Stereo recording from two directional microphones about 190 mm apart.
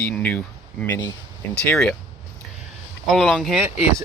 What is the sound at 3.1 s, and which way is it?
Speech, centre (ahead or behind).